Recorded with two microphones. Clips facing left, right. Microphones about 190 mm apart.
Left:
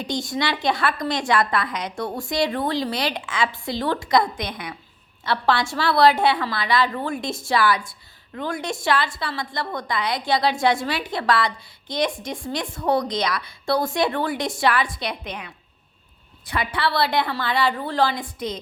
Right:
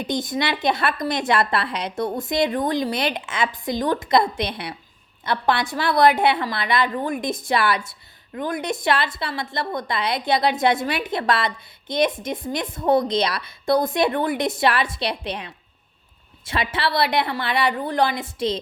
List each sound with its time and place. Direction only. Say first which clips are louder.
0.0 s a woman's voice: right 1 dB; 20° right (ahead or behind)